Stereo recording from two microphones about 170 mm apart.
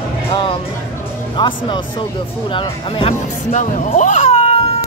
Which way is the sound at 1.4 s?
25° left (ahead or behind).